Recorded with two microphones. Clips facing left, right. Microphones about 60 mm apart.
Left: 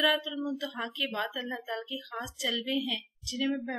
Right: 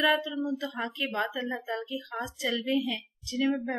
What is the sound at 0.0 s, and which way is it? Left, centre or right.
Speech, right.